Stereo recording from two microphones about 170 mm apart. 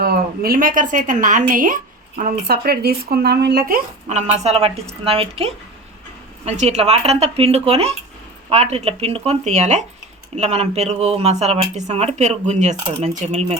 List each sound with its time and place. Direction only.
0.0 s a woman's voice: 60° right (ahead or behind)
4.1 s speech: 40° right (ahead or behind)